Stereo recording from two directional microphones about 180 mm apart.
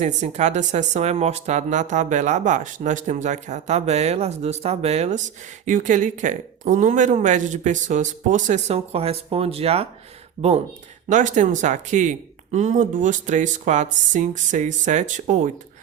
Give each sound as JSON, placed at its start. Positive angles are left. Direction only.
{"t": 0.0, "sound": "speech", "side_deg": -40}
{"t": 11.1, "sound": "speech", "side_deg": -45}